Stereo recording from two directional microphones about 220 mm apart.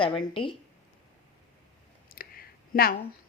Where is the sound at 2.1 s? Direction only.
40° left (ahead or behind).